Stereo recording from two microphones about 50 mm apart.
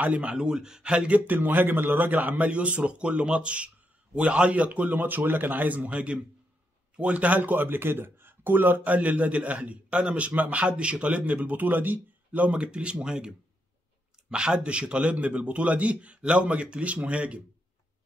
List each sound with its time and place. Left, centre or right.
0.0 s speech: right
14.3 s speech: centre